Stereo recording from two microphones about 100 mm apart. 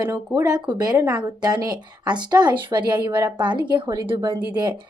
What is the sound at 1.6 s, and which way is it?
Speech, 45° right (ahead or behind).